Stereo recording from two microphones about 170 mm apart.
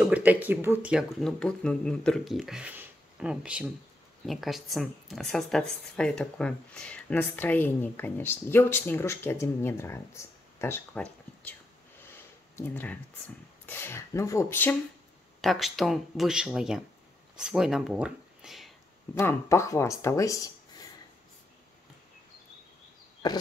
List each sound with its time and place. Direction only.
0.0 s speech: 10° right (ahead or behind)
1.2 s speech: 5° left (ahead or behind)
12.5 s speech: 10° left (ahead or behind)
15.4 s speech: centre (ahead or behind)
19.1 s speech: 15° left (ahead or behind)
23.2 s a sound: 25° left (ahead or behind)